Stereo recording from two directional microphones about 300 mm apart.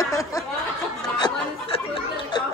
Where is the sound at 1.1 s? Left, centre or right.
Centre.